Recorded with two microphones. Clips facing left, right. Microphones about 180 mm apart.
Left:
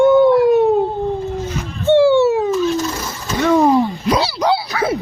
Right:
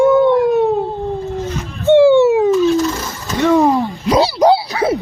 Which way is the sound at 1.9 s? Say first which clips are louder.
Right 3 dB; 15° right (ahead or behind).